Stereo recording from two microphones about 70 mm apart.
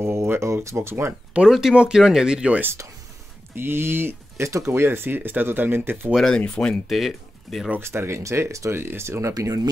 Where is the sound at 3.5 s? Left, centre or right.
Right.